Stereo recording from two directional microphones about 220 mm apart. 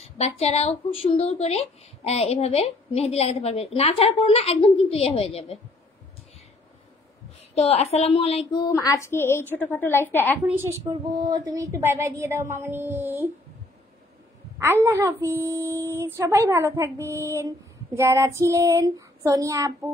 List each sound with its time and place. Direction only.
0.0 s a woman's voice: 30° left (ahead or behind)
7.5 s a woman's voice: 30° left (ahead or behind); by 10.4 s 10° left (ahead or behind)
10.4 s speech: 10° right (ahead or behind)
14.6 s speech: 10° right (ahead or behind)